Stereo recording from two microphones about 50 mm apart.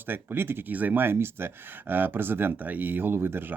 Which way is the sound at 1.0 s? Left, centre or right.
Right.